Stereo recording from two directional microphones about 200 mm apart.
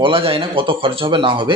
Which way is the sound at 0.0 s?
25° right (ahead or behind).